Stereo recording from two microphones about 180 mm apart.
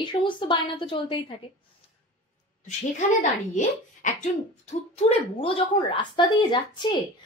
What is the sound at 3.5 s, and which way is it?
Speech, 45° left (ahead or behind).